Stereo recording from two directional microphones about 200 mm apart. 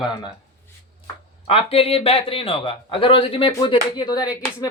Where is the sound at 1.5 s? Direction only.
30° left (ahead or behind).